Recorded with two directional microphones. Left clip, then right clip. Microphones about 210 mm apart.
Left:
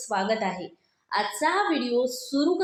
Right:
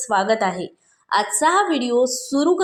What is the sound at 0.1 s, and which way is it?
Speech, 30° right (ahead or behind).